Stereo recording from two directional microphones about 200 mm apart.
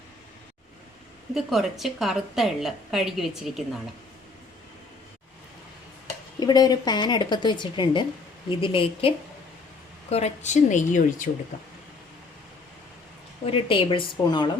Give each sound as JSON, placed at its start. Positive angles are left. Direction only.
{"t": 1.3, "sound": "a woman's voice", "side_deg": 0}
{"t": 6.4, "sound": "a woman's voice", "side_deg": 20}
{"t": 13.4, "sound": "a woman's voice", "side_deg": 25}